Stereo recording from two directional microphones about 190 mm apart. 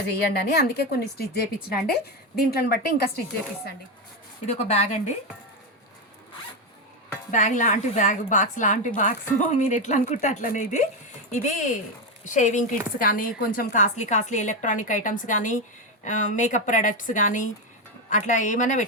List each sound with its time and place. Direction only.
0.6 s a woman's voice: 55° left (ahead or behind)
4.4 s speech: 35° left (ahead or behind)
7.3 s speech: 40° left (ahead or behind)